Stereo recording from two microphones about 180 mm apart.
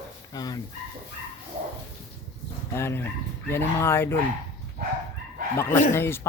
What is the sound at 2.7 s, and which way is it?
Speech, 15° left (ahead or behind).